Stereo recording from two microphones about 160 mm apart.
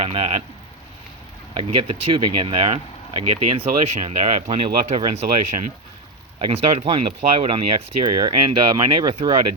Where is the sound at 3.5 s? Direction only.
40° right (ahead or behind).